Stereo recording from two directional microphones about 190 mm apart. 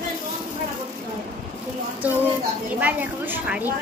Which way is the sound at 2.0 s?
10° right (ahead or behind).